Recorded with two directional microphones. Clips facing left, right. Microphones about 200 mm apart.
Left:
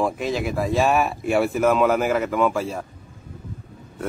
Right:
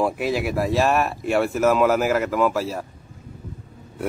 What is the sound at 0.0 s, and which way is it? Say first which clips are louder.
Speech: right 1 dB; 5° right (ahead or behind).